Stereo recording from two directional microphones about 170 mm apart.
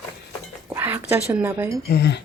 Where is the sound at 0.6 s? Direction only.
15° right (ahead or behind).